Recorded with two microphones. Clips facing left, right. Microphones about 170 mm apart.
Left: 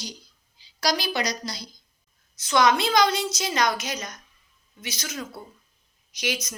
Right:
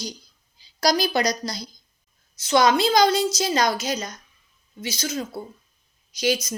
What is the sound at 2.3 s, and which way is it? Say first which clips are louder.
A woman's voice: right 2 dB; 30° right (ahead or behind).